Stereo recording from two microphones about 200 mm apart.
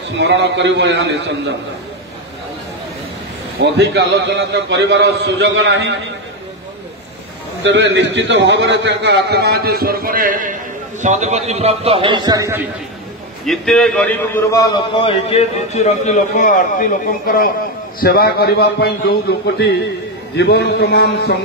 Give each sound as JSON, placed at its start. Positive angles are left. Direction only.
{"t": 0.2, "sound": "a man's voice", "side_deg": -60}
{"t": 3.5, "sound": "a man's voice", "side_deg": -60}
{"t": 7.6, "sound": "a man's voice", "side_deg": -65}
{"t": 13.5, "sound": "a man's voice", "side_deg": 0}